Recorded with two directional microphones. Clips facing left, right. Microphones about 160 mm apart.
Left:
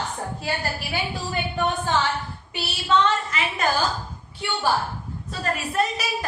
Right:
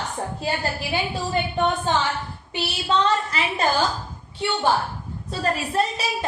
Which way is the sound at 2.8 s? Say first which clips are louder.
Left 1 dB; 35° right (ahead or behind).